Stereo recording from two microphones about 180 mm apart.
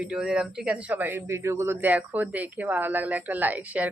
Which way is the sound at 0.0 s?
5° right (ahead or behind).